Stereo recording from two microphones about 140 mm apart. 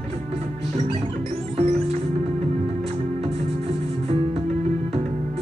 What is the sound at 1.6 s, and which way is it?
Music, 50° right (ahead or behind).